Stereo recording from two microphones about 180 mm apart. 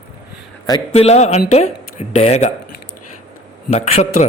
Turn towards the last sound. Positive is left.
turn(degrees=35)  # may be behind; listen again after turning